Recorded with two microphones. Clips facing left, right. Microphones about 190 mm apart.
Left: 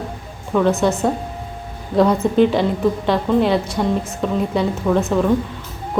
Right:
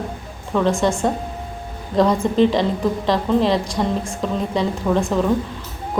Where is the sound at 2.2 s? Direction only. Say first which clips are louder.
Left 1 dB; 5° left (ahead or behind).